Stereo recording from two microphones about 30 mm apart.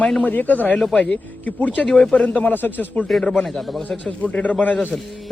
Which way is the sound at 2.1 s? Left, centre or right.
Left.